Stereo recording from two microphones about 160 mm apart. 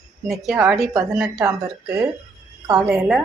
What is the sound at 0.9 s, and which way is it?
A woman's voice, 20° right (ahead or behind).